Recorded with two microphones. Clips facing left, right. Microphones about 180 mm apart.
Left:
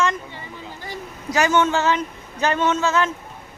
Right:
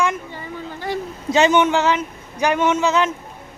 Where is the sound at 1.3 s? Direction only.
25° right (ahead or behind).